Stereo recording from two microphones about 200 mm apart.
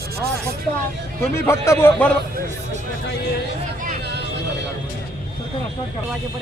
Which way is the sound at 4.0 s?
55° right (ahead or behind).